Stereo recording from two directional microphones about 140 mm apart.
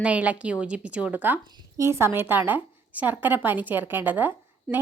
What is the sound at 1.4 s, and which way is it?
Speech, 30° right (ahead or behind).